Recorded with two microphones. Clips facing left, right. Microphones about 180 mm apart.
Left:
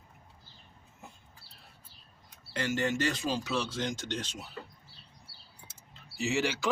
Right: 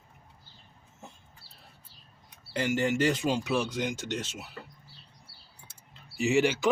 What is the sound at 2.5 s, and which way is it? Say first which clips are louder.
Speech: right 3 dB; 15° right (ahead or behind).